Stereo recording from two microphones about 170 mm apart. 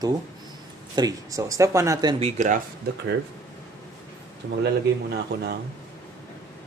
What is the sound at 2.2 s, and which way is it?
Speech, 50° right (ahead or behind).